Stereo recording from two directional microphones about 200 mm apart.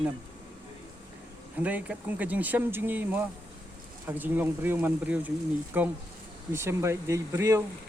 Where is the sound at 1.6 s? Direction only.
5° right (ahead or behind).